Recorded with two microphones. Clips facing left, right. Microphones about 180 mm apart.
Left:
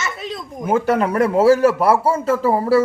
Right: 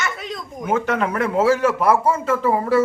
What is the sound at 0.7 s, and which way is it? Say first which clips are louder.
A man's voice: left 4 dB; 35° left (ahead or behind).